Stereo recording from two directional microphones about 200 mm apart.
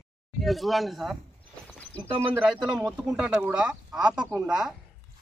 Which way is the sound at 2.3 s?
5° right (ahead or behind).